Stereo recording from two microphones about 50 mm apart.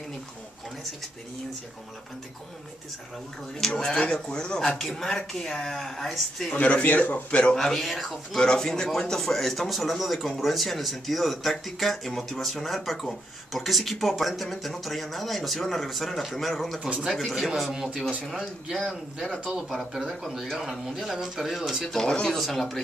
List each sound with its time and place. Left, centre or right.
3.5 s speech: centre
6.5 s speech: left
7.5 s speech: centre
8.4 s speech: centre
21.8 s speech: centre
22.1 s speech: centre
22.4 s speech: centre